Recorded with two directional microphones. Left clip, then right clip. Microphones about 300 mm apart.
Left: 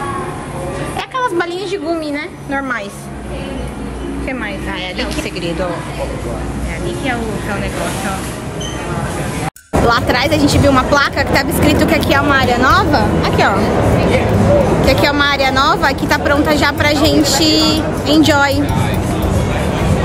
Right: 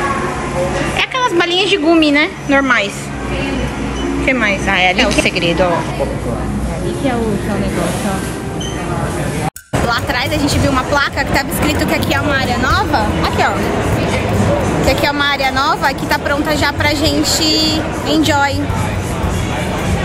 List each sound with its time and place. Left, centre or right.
0.9 s a woman's voice: centre
4.3 s a woman's voice: centre
9.8 s speech: centre
14.9 s a woman's voice: centre